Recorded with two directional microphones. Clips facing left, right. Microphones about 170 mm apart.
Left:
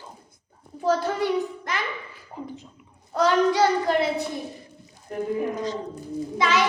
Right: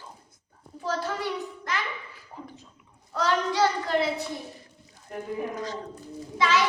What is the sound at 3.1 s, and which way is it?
A child's voice, 15° left (ahead or behind).